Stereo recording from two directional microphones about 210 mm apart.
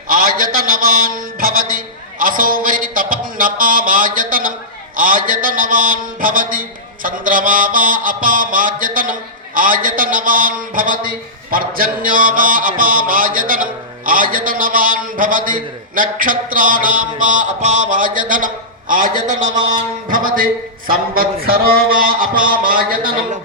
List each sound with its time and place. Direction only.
0.1 s a man's voice: 40° right (ahead or behind)
20.9 s a man's voice: 45° right (ahead or behind)